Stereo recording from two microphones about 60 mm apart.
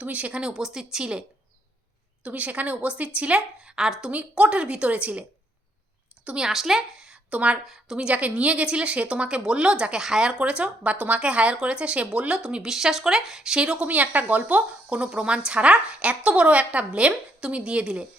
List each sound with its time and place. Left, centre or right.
0.0 s speech: right
2.2 s speech: right; by 4.1 s centre
4.1 s speech: right
6.2 s a woman's voice: centre
12.6 s speech: centre